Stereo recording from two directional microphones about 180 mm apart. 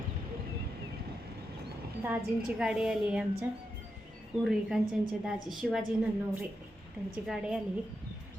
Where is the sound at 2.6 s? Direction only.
5° right (ahead or behind).